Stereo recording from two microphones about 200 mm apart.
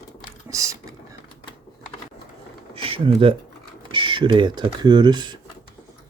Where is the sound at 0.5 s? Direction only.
15° right (ahead or behind).